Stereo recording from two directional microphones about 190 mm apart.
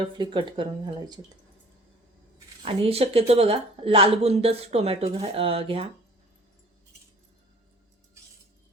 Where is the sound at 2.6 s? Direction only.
30° right (ahead or behind).